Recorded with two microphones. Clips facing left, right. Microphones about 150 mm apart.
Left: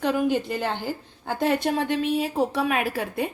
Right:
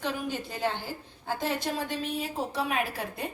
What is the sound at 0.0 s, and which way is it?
A woman's voice, 70° left (ahead or behind).